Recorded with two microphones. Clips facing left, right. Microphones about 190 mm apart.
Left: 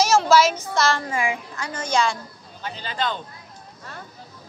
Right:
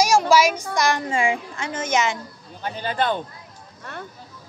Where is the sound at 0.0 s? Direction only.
10° right (ahead or behind).